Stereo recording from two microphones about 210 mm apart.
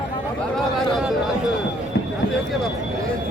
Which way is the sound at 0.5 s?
Centre (ahead or behind).